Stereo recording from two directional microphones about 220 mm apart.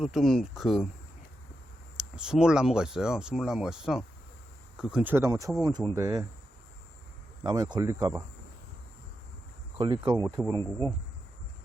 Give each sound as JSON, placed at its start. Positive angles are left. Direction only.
{"t": 0.0, "sound": "speech", "side_deg": 0}
{"t": 2.0, "sound": "speech", "side_deg": -5}
{"t": 7.4, "sound": "speech", "side_deg": -20}
{"t": 9.7, "sound": "speech", "side_deg": -20}
{"t": 10.6, "sound": "speech", "side_deg": 10}